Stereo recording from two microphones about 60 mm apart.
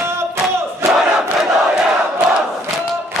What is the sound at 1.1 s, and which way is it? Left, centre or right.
Crowd, centre.